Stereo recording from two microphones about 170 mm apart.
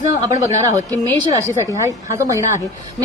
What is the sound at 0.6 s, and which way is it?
A woman's voice, 20° right (ahead or behind).